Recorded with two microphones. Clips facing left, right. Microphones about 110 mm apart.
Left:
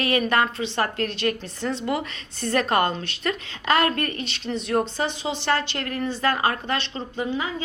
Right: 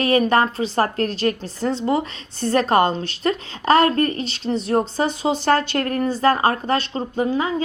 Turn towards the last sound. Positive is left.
turn(degrees=-40)  # may be behind; listen again after turning